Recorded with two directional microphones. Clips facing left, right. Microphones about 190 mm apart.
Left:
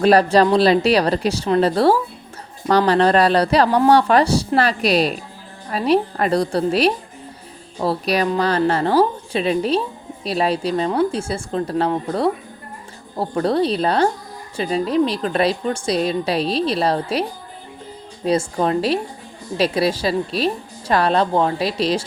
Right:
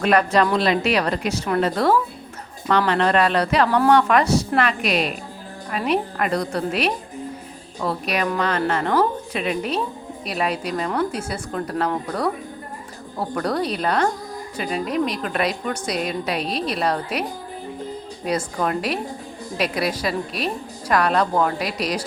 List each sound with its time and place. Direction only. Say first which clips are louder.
0.0 s a woman's voice: left 4 dB; 35° left (ahead or behind)
18.3 s a woman's voice: left 5 dB; 30° left (ahead or behind)